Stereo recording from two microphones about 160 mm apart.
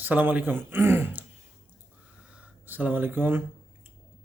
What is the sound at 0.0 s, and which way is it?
Speech, 10° right (ahead or behind).